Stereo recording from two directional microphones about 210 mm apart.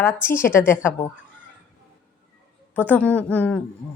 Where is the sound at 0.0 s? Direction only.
10° left (ahead or behind).